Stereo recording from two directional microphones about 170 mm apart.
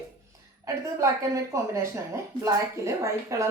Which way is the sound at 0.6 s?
20° right (ahead or behind).